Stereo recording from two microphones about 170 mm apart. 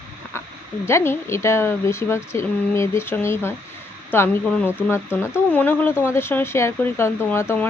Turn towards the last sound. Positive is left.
turn(degrees=15)  # may be behind; listen again after turning